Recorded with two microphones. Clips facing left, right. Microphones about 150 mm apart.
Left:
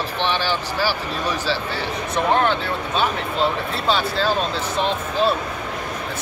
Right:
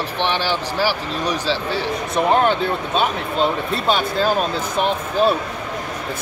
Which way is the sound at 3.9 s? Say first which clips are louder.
Right 2 dB; 15° right (ahead or behind).